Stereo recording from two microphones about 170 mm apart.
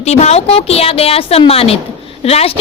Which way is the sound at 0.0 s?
40° left (ahead or behind).